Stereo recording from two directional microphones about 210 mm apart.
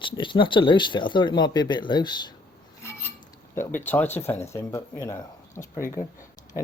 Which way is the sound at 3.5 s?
10° left (ahead or behind).